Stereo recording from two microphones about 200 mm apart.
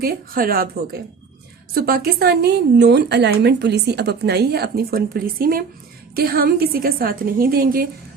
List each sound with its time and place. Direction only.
0.0 s speech: 45° right (ahead or behind)
1.7 s speech: 50° right (ahead or behind)